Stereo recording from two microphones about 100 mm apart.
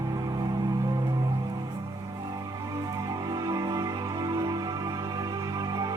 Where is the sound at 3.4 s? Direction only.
40° right (ahead or behind).